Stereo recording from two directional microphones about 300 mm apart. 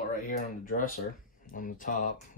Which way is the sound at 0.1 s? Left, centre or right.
Left.